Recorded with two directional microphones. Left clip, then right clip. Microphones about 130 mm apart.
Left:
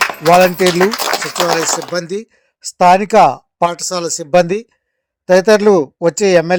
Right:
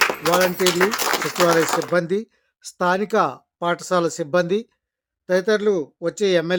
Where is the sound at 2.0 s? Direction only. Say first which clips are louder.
Left 1 dB; 40° left (ahead or behind).